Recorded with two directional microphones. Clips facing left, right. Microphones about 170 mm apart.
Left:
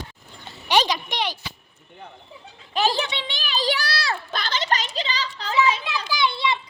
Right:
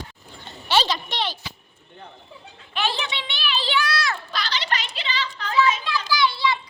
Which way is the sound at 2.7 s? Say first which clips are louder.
Left 4 dB; 40° left (ahead or behind).